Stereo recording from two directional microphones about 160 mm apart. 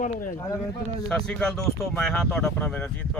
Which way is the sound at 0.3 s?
15° left (ahead or behind).